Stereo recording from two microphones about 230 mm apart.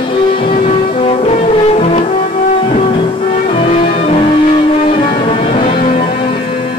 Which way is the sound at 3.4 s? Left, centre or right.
Left.